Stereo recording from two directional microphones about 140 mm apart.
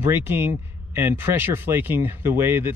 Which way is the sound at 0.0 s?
15° right (ahead or behind).